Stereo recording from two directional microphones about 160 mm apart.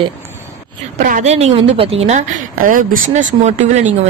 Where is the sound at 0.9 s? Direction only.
50° right (ahead or behind).